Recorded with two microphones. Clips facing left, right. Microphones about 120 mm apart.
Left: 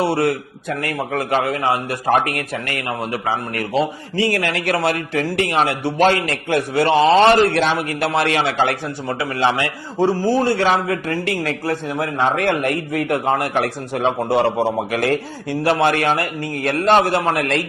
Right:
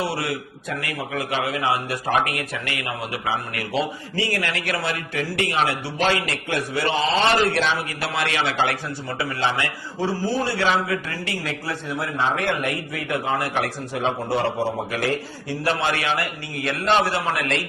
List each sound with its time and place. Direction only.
0.1 s a man's voice: 55° left (ahead or behind); by 4.6 s 35° left (ahead or behind)
4.6 s a man's voice: 50° left (ahead or behind)